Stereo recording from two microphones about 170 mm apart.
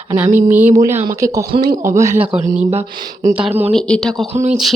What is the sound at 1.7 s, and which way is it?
Speech, 50° right (ahead or behind).